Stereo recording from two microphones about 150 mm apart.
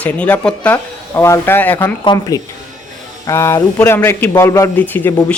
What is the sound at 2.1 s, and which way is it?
A man's voice, 25° left (ahead or behind).